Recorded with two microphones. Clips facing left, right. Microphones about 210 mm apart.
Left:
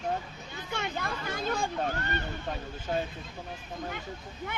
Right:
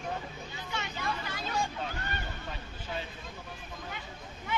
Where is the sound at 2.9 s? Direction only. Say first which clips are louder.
Left 8 dB; 45° left (ahead or behind).